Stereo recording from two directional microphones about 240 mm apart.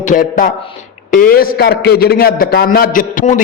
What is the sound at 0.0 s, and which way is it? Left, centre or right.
A man's voice, left.